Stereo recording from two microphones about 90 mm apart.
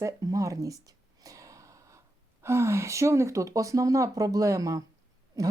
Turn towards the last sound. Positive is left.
turn(degrees=-40)  # may be behind; listen again after turning